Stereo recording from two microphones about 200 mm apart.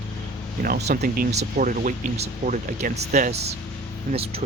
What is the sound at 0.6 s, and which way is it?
Speech, 45° right (ahead or behind).